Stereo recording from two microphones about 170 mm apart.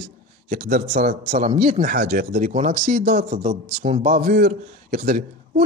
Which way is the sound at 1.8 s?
60° right (ahead or behind).